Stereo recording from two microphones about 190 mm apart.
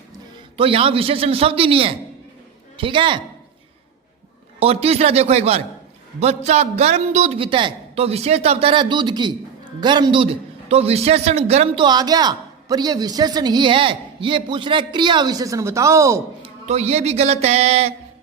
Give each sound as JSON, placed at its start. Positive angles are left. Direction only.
{"t": 0.5, "sound": "a man's voice", "side_deg": -30}
{"t": 4.6, "sound": "a man's voice", "side_deg": -30}
{"t": 16.4, "sound": "a man's voice", "side_deg": -35}